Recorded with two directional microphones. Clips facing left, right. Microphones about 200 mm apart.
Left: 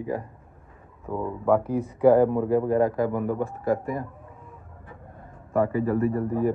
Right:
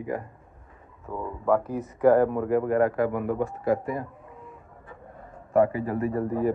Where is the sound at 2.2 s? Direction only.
30° left (ahead or behind); by 4.0 s 45° left (ahead or behind).